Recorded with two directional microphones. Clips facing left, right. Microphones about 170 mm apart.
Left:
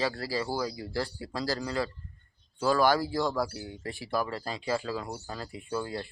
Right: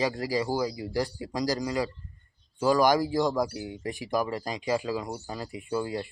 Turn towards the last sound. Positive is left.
turn(degrees=-10)  # may be behind; listen again after turning